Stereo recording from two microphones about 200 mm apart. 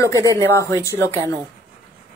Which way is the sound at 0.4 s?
15° left (ahead or behind).